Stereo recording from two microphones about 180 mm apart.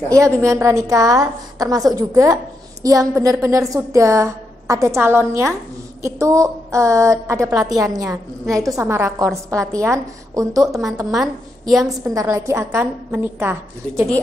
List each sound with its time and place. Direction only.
0.1 s a woman's voice: 15° right (ahead or behind)